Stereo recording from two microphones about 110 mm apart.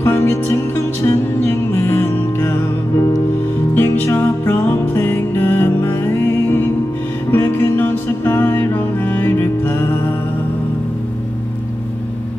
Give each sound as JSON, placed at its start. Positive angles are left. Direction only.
{"t": 0.0, "sound": "music", "side_deg": 25}
{"t": 3.7, "sound": "music", "side_deg": 20}